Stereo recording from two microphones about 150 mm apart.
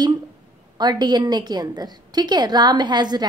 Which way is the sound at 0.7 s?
25° right (ahead or behind).